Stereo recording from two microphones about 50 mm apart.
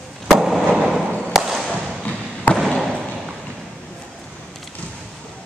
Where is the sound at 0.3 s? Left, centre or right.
Centre.